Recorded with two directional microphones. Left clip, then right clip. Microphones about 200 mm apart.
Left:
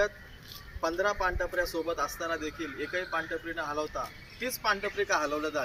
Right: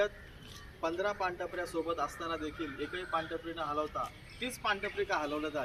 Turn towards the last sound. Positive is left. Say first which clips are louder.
# left 5 dB
turn(degrees=10)  # may be behind; listen again after turning